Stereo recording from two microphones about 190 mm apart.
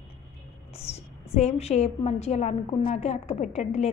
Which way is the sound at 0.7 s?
35° left (ahead or behind).